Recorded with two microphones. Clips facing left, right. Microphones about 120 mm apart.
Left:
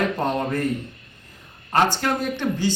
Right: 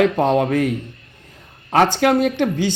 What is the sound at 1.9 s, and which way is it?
Speech, 80° right.